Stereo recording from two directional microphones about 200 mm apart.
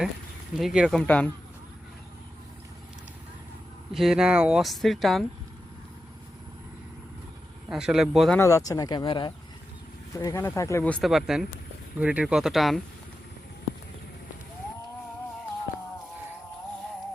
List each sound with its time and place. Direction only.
0.5 s speech: centre (ahead or behind)
3.9 s speech: centre (ahead or behind)
7.7 s speech: centre (ahead or behind)
8.4 s speech: 15° left (ahead or behind); by 12.8 s centre (ahead or behind)